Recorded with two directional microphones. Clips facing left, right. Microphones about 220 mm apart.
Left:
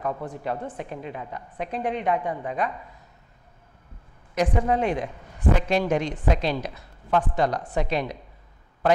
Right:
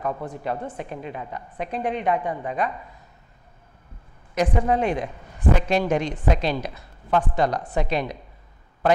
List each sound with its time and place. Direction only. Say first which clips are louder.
0.0 s a woman's voice: right 1 dB; 25° right (ahead or behind)
4.4 s speech: right 1 dB; 15° right (ahead or behind)